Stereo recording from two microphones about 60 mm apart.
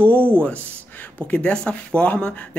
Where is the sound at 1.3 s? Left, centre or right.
Centre.